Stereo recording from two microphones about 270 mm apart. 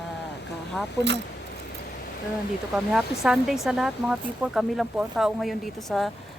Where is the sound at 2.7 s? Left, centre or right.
Centre.